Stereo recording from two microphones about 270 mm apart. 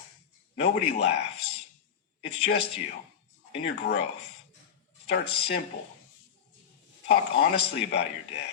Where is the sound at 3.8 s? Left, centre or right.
Left.